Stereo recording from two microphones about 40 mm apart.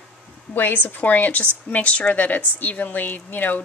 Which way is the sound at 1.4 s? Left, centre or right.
Left.